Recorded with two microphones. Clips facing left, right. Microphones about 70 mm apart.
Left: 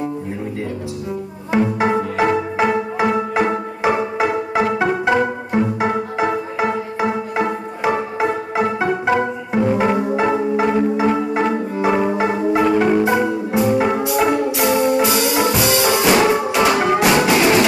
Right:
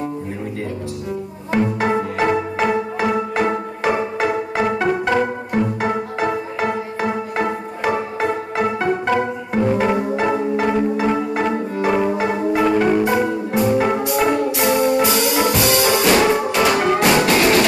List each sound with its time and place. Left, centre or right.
1.5 s music: centre
12.6 s marimba: centre
13.0 s music: centre